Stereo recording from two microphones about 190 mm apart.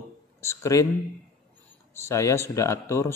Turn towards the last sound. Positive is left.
turn(degrees=15)  # may be behind; listen again after turning